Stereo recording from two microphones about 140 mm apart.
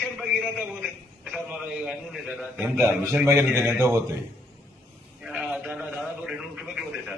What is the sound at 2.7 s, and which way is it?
A man's voice, 20° right (ahead or behind).